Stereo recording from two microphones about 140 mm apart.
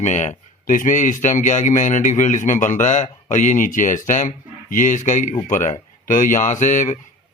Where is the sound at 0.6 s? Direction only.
70° left (ahead or behind).